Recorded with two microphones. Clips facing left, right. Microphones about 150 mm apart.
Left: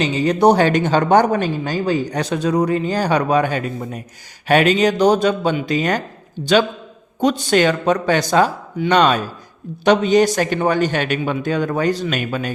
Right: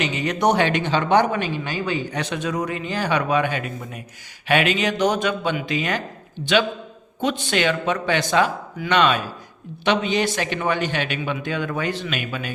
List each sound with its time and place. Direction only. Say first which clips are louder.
0.0 s speech: left 6 dB; 35° left (ahead or behind)